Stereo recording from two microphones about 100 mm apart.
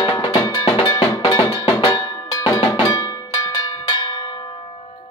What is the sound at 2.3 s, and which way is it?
Cowbell, 30° left (ahead or behind).